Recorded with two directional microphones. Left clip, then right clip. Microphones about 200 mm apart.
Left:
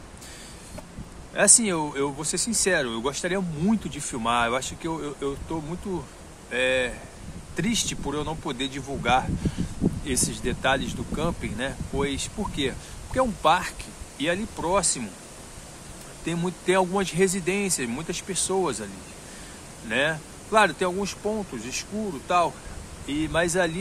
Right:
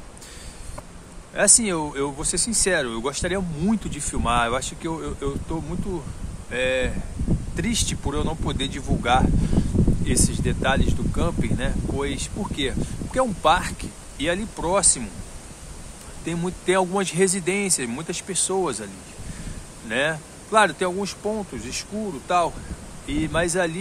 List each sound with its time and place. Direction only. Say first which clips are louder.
1.3 s speech: right 1 dB; 5° right (ahead or behind)
16.3 s speech: right 1 dB; 5° right (ahead or behind)
19.9 s speech: right 1 dB; 10° right (ahead or behind)